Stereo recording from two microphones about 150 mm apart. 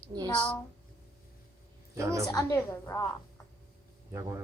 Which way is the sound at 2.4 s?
15° left (ahead or behind).